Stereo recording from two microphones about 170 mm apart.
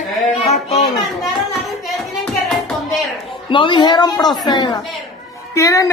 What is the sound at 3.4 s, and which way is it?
Speech, 30° left (ahead or behind).